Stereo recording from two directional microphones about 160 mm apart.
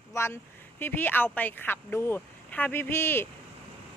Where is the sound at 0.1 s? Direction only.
15° left (ahead or behind).